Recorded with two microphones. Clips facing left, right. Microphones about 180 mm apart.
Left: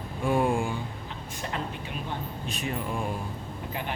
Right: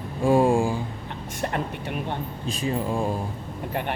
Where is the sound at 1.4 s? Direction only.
55° right (ahead or behind).